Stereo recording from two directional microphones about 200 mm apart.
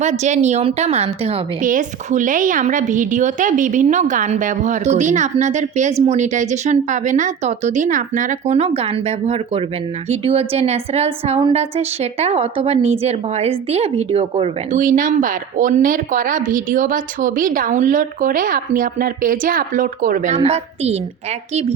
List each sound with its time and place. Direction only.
0.0 s a woman's voice: 35° right (ahead or behind)